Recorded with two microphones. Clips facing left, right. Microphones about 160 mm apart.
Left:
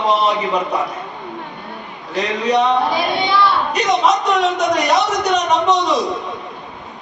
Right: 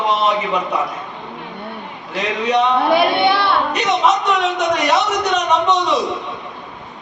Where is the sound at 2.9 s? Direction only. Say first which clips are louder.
Right 3 dB; 60° right (ahead or behind).